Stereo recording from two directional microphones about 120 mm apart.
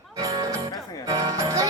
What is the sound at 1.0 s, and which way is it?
Speech, 30° right (ahead or behind).